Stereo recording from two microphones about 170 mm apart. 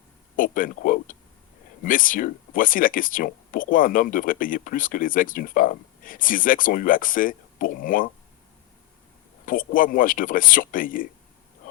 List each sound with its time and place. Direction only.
0.3 s speech: 55° left (ahead or behind)
9.5 s speech: 55° left (ahead or behind)